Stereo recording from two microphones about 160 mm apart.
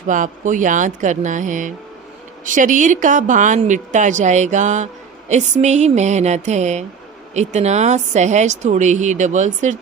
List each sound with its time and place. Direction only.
0.1 s a woman's voice: 55° right (ahead or behind)